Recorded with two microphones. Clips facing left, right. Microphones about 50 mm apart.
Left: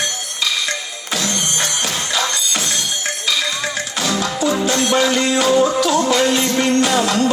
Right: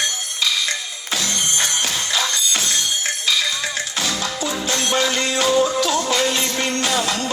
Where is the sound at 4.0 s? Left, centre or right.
Left.